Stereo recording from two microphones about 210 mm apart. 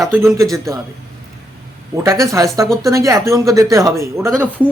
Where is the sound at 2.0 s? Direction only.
15° right (ahead or behind).